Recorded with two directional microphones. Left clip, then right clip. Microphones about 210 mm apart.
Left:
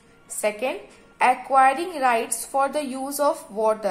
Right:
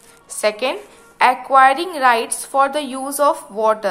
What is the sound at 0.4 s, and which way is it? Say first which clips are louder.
A woman's voice: right 6 dB; 15° right (ahead or behind).